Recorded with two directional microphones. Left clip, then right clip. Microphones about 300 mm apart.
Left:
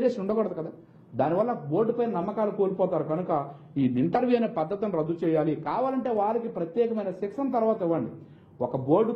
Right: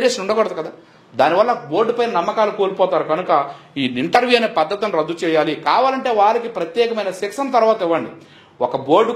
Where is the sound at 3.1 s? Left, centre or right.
Centre.